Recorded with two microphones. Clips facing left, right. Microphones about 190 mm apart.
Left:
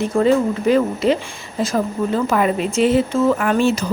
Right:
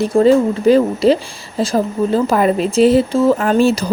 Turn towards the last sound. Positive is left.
turn(degrees=-35)  # may be behind; listen again after turning